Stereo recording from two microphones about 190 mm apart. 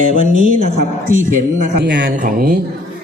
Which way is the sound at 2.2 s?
50° right (ahead or behind).